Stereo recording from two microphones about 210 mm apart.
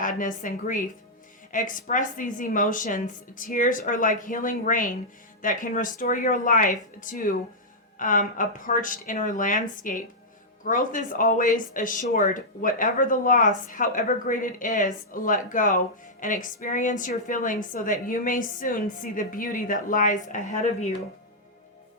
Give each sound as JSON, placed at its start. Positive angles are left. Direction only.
{"t": 0.0, "sound": "speech", "side_deg": 40}